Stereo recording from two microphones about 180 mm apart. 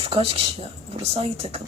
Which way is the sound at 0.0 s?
30° right (ahead or behind).